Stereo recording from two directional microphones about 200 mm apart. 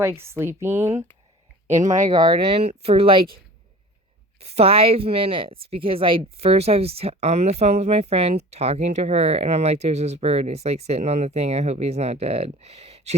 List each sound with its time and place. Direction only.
0.0 s speech: 15° right (ahead or behind)
2.0 s speech: 20° right (ahead or behind)
4.4 s speech: 30° right (ahead or behind)